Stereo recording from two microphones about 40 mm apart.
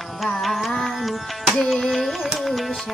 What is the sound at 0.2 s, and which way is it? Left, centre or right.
Music, centre.